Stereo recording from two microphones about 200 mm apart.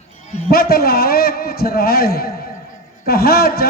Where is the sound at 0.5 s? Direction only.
50° left (ahead or behind).